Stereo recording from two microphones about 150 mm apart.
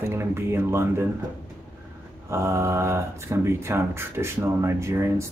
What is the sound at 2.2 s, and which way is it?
Speech, 20° right (ahead or behind).